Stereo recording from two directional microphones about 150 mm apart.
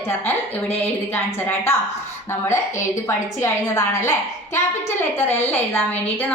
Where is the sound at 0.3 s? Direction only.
15° left (ahead or behind).